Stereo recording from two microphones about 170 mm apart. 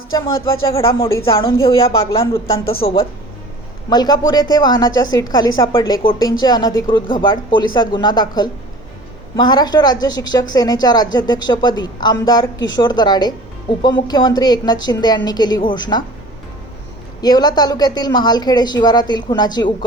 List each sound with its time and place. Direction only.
0.9 s speech: 15° left (ahead or behind)
1.2 s speech: 30° left (ahead or behind)
1.6 s a woman's voice: 20° left (ahead or behind)
17.2 s a woman's voice: 25° left (ahead or behind)